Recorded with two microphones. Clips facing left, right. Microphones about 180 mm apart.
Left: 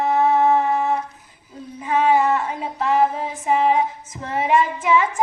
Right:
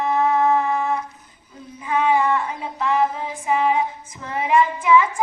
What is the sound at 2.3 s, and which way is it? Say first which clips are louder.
Female singing: left 1 dB; 30° left (ahead or behind).